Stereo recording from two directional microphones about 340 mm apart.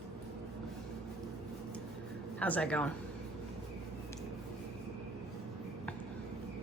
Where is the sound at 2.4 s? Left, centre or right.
Centre.